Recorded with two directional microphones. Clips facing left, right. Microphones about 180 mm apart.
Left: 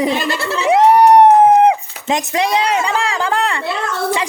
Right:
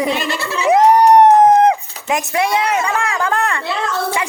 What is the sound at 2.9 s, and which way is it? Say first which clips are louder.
Speech: left 1 dB; 30° left (ahead or behind).